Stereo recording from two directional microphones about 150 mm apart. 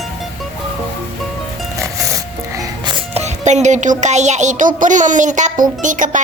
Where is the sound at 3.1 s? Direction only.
50° right (ahead or behind).